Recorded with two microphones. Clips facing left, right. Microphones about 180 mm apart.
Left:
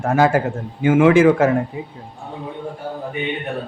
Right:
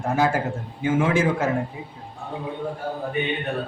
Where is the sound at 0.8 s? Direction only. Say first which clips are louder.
Left 9 dB; 75° left (ahead or behind).